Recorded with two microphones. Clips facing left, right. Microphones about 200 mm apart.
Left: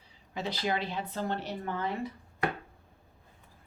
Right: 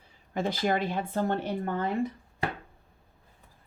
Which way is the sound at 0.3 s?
50° right (ahead or behind).